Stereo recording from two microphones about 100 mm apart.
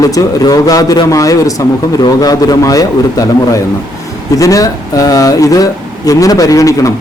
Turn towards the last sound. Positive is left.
turn(degrees=35)  # may be behind; listen again after turning